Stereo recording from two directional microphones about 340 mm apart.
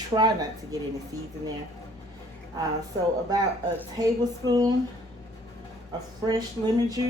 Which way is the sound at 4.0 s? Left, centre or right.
Centre.